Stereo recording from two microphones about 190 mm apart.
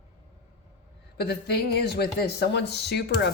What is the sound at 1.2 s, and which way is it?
Speech, 55° left (ahead or behind).